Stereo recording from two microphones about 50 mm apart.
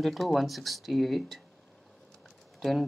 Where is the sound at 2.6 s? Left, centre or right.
Centre.